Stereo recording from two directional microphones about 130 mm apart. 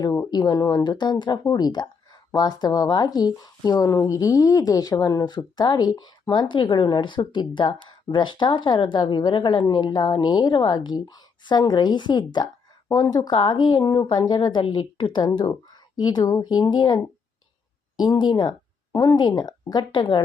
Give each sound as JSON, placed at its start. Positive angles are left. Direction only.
{"t": 0.0, "sound": "speech", "side_deg": 30}